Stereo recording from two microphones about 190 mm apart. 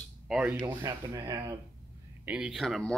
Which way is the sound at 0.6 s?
20° right (ahead or behind).